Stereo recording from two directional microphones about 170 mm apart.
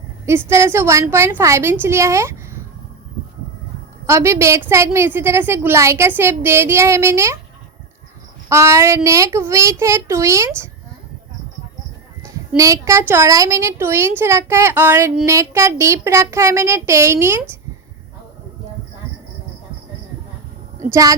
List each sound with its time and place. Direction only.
0.3 s a woman's voice: 15° right (ahead or behind)
4.0 s a woman's voice: 15° right (ahead or behind)
8.4 s a woman's voice: 15° right (ahead or behind)
12.2 s a woman's voice: 20° right (ahead or behind)
20.9 s speech: 20° right (ahead or behind)